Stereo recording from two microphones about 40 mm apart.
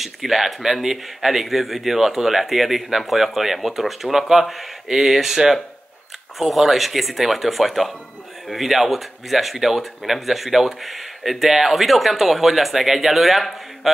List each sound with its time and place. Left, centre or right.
0.0 s speech: centre